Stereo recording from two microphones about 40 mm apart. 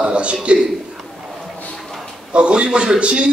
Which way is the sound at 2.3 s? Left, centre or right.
Right.